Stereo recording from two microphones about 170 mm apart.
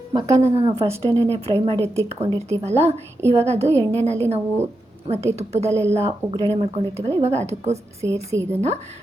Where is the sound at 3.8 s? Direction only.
10° left (ahead or behind).